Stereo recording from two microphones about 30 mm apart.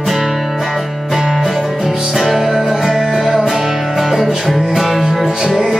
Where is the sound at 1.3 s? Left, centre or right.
Centre.